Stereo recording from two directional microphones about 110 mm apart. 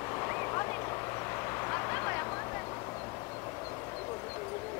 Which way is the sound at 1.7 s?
25° left (ahead or behind).